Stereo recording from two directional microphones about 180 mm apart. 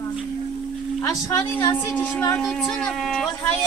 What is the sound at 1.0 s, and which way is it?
A woman's voice, 15° left (ahead or behind).